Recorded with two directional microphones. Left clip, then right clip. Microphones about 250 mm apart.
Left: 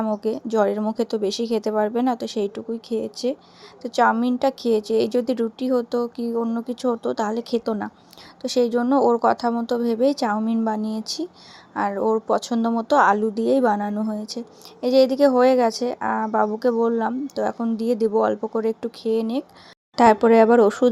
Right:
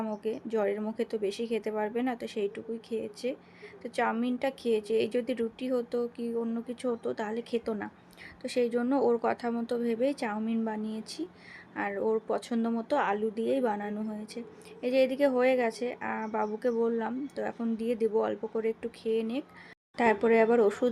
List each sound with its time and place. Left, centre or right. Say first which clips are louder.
0.0 s a woman's voice: left 10 dB; left